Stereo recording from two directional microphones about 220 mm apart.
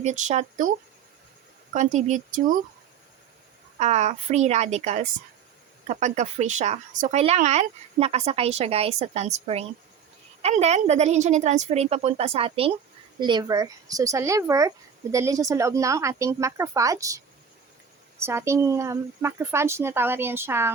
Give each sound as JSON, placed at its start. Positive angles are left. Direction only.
{"t": 0.0, "sound": "a woman's voice", "side_deg": -35}
{"t": 1.7, "sound": "a woman's voice", "side_deg": -35}
{"t": 3.8, "sound": "a woman's voice", "side_deg": -30}